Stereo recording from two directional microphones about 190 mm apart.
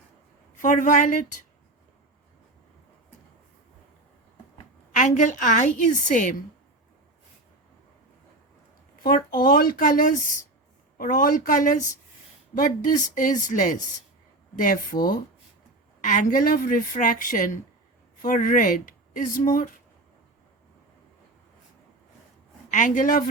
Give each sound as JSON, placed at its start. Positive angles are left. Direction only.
{"t": 0.6, "sound": "a woman's voice", "side_deg": 40}
{"t": 4.9, "sound": "a woman's voice", "side_deg": 40}
{"t": 9.0, "sound": "a woman's voice", "side_deg": 50}
{"t": 16.0, "sound": "a woman's voice", "side_deg": 45}
{"t": 22.7, "sound": "a woman's voice", "side_deg": 40}